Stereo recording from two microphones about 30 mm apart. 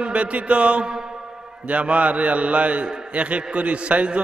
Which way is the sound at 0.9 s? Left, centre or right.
Right.